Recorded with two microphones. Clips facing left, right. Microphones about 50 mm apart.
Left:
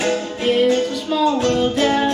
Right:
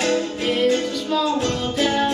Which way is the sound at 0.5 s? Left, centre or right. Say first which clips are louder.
Left 4 dB; centre.